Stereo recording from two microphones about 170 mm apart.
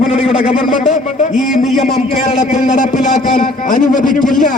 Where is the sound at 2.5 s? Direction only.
45° left (ahead or behind).